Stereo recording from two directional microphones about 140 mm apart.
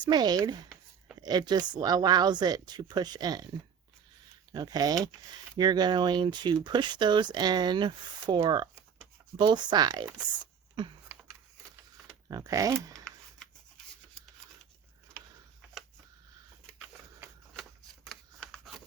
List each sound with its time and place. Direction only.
0.0 s speech: 30° right (ahead or behind)
4.5 s speech: 30° right (ahead or behind)
10.4 s a sound: 35° right (ahead or behind)
12.3 s speech: 25° right (ahead or behind)
13.8 s rub: 5° left (ahead or behind)
17.6 s shuffling cards: centre (ahead or behind)